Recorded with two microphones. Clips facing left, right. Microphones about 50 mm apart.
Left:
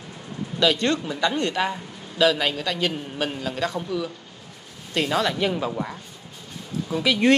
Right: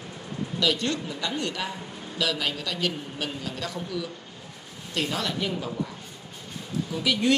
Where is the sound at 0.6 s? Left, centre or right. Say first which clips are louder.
Left 6 dB; left.